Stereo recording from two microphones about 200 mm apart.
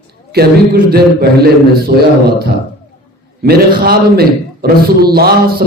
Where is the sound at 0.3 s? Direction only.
50° right (ahead or behind).